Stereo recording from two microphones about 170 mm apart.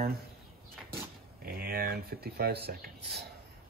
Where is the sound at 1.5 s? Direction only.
60° right (ahead or behind).